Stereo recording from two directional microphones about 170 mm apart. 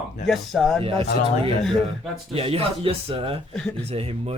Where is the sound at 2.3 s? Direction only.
35° right (ahead or behind).